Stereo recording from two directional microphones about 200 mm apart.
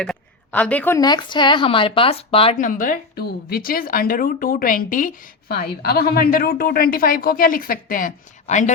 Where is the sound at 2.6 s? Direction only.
40° left (ahead or behind).